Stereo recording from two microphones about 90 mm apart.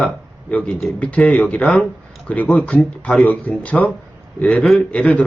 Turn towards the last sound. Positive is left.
turn(degrees=15)  # may be behind; listen again after turning